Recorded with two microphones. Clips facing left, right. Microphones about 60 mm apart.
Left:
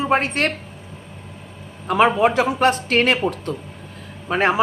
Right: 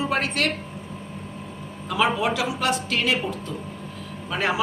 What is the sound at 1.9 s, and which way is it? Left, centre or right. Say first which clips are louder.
A woman's voice: left 6 dB; left.